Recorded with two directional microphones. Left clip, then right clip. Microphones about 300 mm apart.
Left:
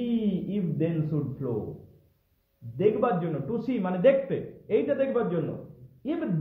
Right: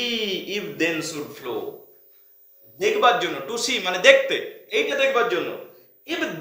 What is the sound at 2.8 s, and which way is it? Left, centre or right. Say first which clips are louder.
A man's voice: right 6 dB; centre.